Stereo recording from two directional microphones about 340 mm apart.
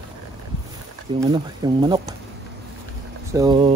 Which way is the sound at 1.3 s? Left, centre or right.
Centre.